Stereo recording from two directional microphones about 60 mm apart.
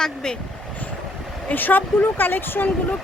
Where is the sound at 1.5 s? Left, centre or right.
Left.